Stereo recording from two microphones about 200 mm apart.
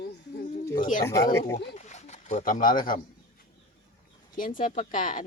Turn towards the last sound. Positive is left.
turn(degrees=40)  # may be behind; listen again after turning